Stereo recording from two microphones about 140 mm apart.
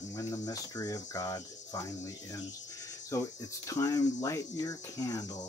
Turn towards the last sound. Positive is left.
turn(degrees=25)  # may be behind; listen again after turning